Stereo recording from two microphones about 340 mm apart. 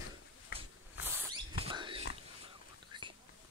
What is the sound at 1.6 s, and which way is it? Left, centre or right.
Pig, centre.